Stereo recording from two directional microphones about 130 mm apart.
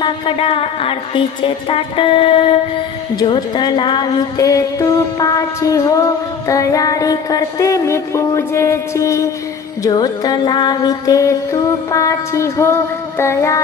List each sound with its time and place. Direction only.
0.0 s a woman's voice: 45° left (ahead or behind)
3.2 s a woman's voice: 35° left (ahead or behind)
4.4 s music: 25° left (ahead or behind)